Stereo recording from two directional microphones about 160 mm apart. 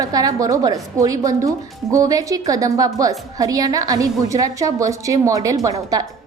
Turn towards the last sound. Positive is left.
turn(degrees=-20)  # may be behind; listen again after turning